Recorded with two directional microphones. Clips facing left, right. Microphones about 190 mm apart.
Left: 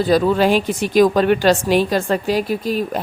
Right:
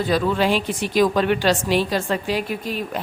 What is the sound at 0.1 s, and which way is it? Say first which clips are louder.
A woman's voice: left 5 dB; 45° left (ahead or behind).